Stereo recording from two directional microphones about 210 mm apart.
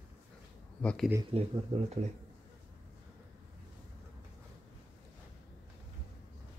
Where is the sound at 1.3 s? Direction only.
30° right (ahead or behind).